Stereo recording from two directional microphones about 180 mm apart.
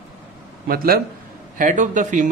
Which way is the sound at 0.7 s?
55° right (ahead or behind).